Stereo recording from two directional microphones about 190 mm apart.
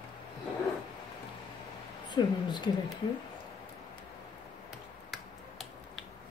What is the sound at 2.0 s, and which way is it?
Speech, 25° left (ahead or behind).